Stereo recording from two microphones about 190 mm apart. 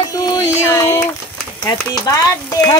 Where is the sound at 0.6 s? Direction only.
15° left (ahead or behind).